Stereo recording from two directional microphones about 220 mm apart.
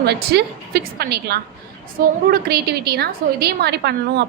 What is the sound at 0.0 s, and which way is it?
A woman's voice, 50° right (ahead or behind).